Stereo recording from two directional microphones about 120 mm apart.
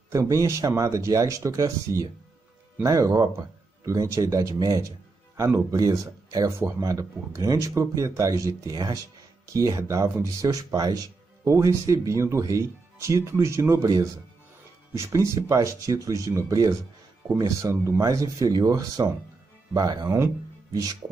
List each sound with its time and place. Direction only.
0.1 s speech: 25° right (ahead or behind)